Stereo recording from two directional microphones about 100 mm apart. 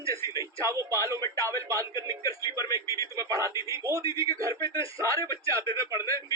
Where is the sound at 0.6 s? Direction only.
30° right (ahead or behind).